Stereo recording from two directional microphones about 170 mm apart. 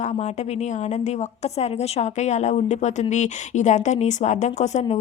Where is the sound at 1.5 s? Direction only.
40° left (ahead or behind).